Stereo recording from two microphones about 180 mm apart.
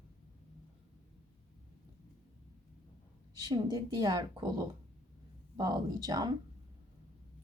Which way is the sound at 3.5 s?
25° right (ahead or behind).